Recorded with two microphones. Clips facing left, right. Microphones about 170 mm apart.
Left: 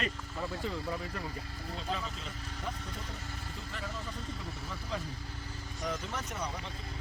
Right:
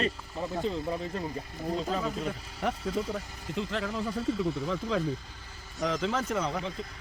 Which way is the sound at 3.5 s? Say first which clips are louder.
Right 13 dB; 90° right.